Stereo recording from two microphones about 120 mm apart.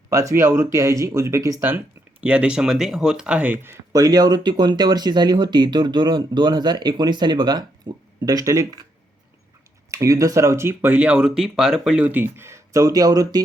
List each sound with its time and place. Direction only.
0.1 s speech: 25° right (ahead or behind)
2.2 s speech: 10° right (ahead or behind)
3.9 s speech: 30° right (ahead or behind)
9.9 s speech: 25° right (ahead or behind)